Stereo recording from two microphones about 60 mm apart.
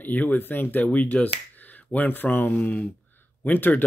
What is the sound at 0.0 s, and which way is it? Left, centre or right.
Speech, left.